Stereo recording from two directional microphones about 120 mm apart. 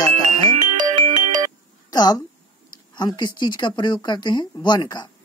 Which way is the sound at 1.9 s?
35° left (ahead or behind).